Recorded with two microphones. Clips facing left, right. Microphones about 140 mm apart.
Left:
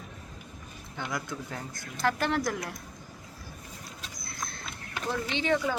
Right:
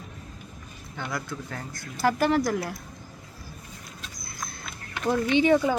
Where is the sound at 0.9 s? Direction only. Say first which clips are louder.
Right 2 dB; 15° left (ahead or behind).